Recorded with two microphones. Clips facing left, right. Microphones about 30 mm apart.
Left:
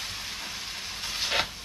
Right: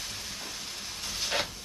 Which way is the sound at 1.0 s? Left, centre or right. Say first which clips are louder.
Left 3 dB; left.